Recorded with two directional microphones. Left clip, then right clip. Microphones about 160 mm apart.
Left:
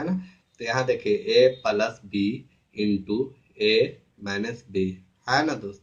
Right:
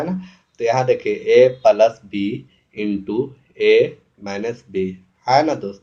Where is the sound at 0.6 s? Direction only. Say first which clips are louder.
Right 8 dB; 25° left (ahead or behind).